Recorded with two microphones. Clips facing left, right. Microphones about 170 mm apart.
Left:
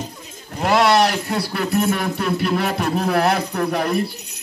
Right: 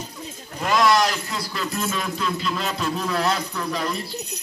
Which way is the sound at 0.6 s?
65° left (ahead or behind).